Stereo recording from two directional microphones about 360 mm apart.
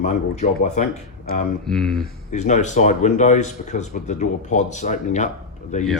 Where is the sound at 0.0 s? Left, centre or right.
Centre.